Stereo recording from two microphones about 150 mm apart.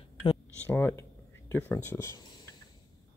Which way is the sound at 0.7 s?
15° left (ahead or behind).